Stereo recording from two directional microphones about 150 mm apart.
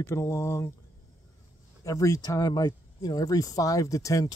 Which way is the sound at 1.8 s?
20° left (ahead or behind).